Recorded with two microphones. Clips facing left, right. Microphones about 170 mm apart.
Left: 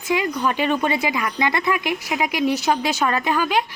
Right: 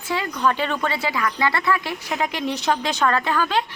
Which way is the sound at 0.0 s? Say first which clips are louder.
Left 1 dB; 15° left (ahead or behind).